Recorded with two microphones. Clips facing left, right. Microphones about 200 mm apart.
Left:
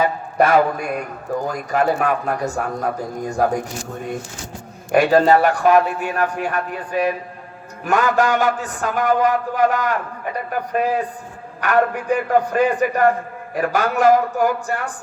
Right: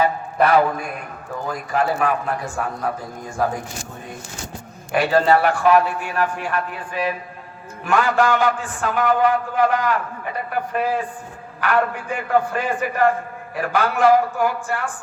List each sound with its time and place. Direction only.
0.0 s a man's voice: 45° left (ahead or behind)
4.9 s a man's voice: 45° left (ahead or behind)